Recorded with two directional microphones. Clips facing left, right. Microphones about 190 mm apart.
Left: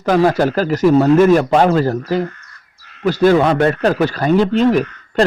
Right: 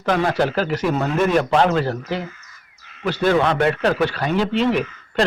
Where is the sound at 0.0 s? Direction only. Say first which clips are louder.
Left 6 dB; 40° left (ahead or behind).